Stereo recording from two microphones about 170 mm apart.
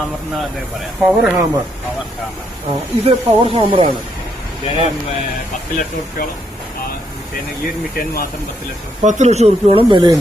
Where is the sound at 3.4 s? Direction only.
30° right (ahead or behind).